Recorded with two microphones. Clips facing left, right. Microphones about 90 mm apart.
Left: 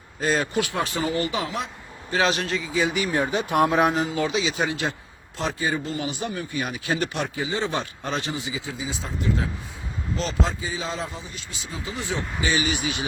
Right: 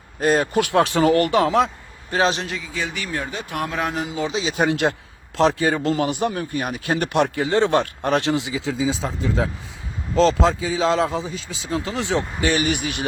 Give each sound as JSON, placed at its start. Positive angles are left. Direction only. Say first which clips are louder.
{"t": 0.2, "sound": "speech", "louder": "right 5 dB", "side_deg": -50}
{"t": 0.7, "sound": "speech", "louder": "right 9 dB", "side_deg": -75}
{"t": 2.0, "sound": "a man's voice", "louder": "right 3 dB", "side_deg": -40}
{"t": 2.7, "sound": "speech", "louder": "left 5 dB", "side_deg": 10}
{"t": 4.3, "sound": "speech", "louder": "right 4 dB", "side_deg": -40}
{"t": 5.4, "sound": "a man's voice", "louder": "right 8 dB", "side_deg": -90}